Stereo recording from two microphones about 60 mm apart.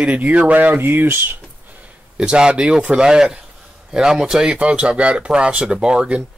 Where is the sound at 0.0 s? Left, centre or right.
Right.